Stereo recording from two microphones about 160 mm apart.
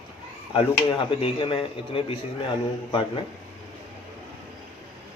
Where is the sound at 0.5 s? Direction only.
35° left (ahead or behind).